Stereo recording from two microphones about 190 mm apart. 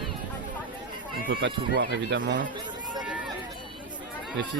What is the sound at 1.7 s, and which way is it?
Speech, 70° right (ahead or behind).